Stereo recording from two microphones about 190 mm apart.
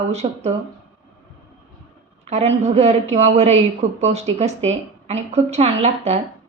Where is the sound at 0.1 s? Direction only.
35° right (ahead or behind).